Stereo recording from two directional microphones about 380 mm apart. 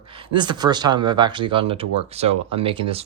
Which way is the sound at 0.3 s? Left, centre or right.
Centre.